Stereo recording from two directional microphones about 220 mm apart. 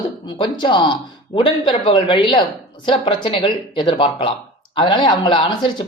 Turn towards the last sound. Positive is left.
turn(degrees=20)  # may be behind; listen again after turning